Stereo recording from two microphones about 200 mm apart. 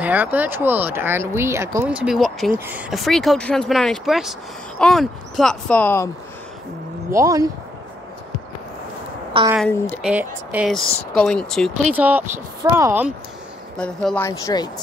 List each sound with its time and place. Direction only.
0.0 s speech: 10° right (ahead or behind); by 6.0 s 10° left (ahead or behind)
7.1 s speech: 15° right (ahead or behind)
9.6 s speech: 10° left (ahead or behind)
10.0 s speech: 5° right (ahead or behind)
11.1 s speech: 5° left (ahead or behind)
11.9 s speech: 10° right (ahead or behind)
13.7 s speech: 5° left (ahead or behind)